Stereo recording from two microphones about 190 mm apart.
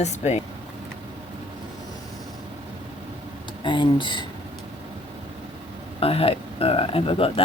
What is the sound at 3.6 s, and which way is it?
Speech, 25° left (ahead or behind).